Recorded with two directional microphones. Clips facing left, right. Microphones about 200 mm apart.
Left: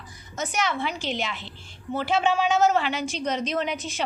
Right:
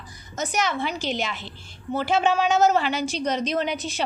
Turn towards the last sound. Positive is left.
turn(degrees=-35)  # may be behind; listen again after turning